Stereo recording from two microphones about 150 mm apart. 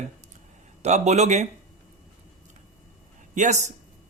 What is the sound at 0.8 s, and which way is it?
Speech, 50° right (ahead or behind).